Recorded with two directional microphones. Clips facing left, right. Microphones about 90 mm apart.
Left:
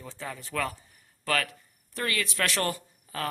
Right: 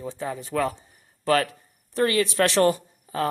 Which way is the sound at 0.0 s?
20° right (ahead or behind).